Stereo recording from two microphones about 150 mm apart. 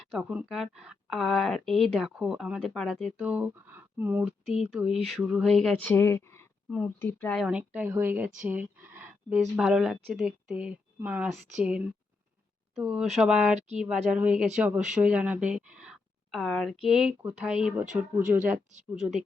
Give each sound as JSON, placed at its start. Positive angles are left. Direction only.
{"t": 0.1, "sound": "speech", "side_deg": -5}
{"t": 4.4, "sound": "speech", "side_deg": 0}
{"t": 6.7, "sound": "speech", "side_deg": 0}
{"t": 7.0, "sound": "speech", "side_deg": 15}
{"t": 7.3, "sound": "speech", "side_deg": -5}
{"t": 18.7, "sound": "speech", "side_deg": -55}